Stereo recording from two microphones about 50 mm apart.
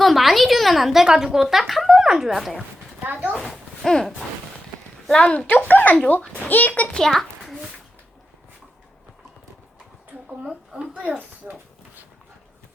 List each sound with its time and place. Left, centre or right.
0.0 s speech: centre
1.0 s a woman's voice: centre
3.1 s speech: right
3.3 s a sound: centre
5.1 s speech: centre
5.5 s speech: left
6.9 s a sound: centre
10.2 s speech: centre
11.4 s speech: right